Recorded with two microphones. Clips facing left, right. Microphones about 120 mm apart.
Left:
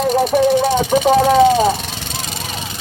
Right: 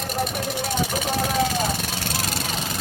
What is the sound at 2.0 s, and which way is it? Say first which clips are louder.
Vehicle: even; 5° right (ahead or behind).